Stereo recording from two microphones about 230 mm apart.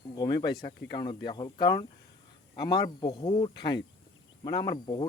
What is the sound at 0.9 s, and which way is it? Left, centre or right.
Speech, centre.